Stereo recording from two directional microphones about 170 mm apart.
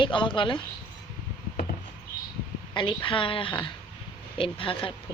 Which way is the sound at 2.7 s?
30° left (ahead or behind).